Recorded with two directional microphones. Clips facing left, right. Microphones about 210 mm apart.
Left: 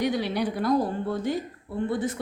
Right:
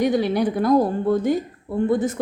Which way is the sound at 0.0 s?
50° right (ahead or behind).